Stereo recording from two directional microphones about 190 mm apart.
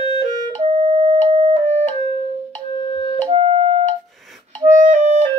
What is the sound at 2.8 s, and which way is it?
Music, 30° left (ahead or behind).